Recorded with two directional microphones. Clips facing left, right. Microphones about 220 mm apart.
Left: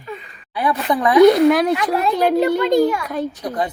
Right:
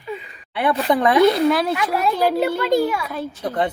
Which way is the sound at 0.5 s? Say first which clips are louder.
Right 1 dB; 30° right (ahead or behind).